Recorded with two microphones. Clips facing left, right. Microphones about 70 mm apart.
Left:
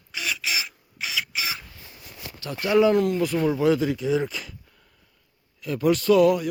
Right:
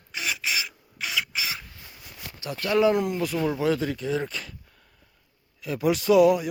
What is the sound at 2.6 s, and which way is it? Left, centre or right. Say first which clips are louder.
Speech: left 3 dB; centre.